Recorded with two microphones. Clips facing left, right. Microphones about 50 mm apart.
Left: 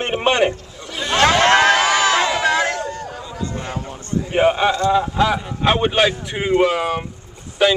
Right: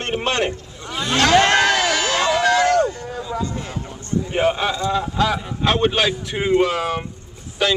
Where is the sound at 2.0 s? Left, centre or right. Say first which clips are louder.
Left 3 dB; left.